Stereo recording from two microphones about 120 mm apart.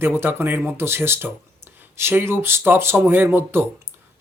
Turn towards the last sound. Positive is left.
turn(degrees=-20)  # may be behind; listen again after turning